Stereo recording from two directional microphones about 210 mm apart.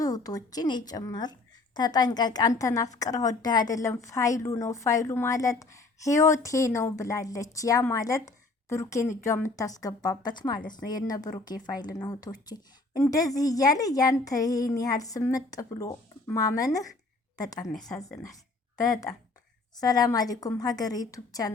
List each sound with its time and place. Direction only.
0.0 s a woman's voice: 20° left (ahead or behind)
18.8 s a woman's voice: 15° left (ahead or behind)